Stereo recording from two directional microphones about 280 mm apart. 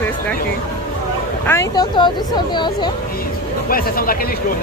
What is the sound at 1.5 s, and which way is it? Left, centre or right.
Speech, centre.